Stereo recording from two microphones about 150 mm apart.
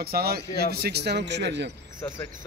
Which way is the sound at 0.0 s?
90° right.